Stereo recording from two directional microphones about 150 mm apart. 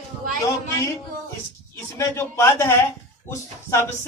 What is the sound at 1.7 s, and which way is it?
A man's voice, 20° left (ahead or behind).